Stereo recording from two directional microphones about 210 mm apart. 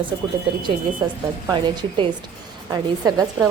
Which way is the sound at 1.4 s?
20° right (ahead or behind).